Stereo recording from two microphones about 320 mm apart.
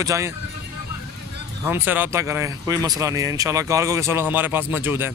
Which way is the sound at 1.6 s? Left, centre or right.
Centre.